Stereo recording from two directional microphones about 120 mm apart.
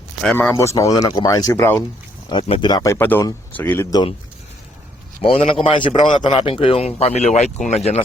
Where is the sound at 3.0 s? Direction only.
15° left (ahead or behind).